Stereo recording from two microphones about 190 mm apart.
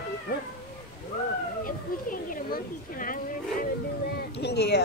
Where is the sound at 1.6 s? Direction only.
45° left (ahead or behind).